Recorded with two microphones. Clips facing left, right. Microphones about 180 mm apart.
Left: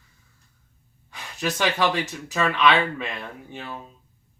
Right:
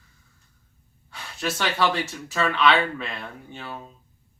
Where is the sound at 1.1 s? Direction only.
15° left (ahead or behind).